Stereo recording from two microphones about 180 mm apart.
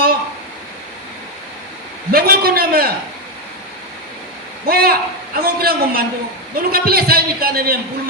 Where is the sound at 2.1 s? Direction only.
60° right (ahead or behind).